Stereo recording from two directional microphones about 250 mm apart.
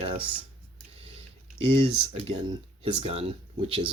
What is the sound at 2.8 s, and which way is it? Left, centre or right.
Speech, right.